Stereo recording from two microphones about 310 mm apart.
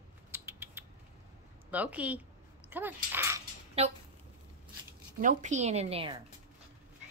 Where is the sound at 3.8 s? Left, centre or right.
Centre.